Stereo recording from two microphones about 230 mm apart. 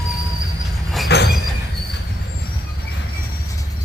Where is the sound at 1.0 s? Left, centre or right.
Left.